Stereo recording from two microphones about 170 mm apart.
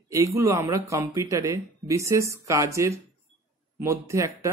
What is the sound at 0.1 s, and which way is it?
Speech, 20° right (ahead or behind).